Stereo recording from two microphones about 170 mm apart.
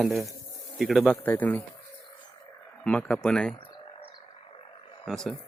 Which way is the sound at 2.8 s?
5° left (ahead or behind).